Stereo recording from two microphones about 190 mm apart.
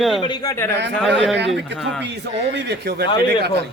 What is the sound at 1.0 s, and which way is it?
Speech, centre (ahead or behind).